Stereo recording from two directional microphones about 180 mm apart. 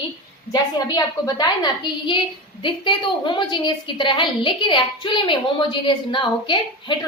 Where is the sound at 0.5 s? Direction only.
20° left (ahead or behind).